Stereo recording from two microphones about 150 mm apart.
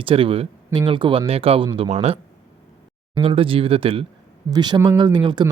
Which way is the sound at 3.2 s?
35° right (ahead or behind).